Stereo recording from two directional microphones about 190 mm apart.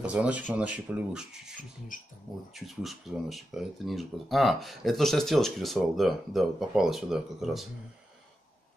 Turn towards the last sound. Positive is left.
turn(degrees=0)  # may be behind; listen again after turning